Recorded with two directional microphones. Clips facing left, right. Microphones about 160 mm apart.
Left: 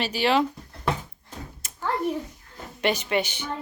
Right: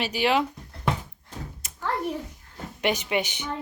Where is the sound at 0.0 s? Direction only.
15° right (ahead or behind).